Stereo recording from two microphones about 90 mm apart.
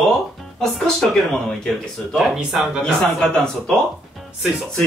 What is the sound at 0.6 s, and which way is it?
Speech, 5° left (ahead or behind).